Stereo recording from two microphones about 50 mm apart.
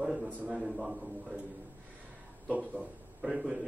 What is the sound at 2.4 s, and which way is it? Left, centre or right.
Speech, right.